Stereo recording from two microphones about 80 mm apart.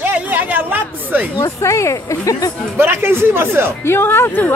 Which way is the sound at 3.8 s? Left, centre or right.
Left.